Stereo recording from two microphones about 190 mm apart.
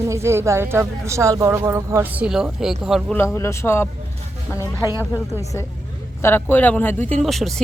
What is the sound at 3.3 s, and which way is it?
Speech, 15° left (ahead or behind).